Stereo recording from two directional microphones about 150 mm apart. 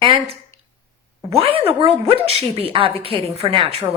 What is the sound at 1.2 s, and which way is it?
A woman's voice, 40° right (ahead or behind).